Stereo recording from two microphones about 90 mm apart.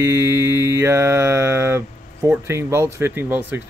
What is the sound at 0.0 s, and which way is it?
Mantra, 30° right (ahead or behind).